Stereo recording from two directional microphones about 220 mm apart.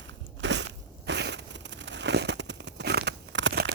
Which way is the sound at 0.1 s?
55° right (ahead or behind).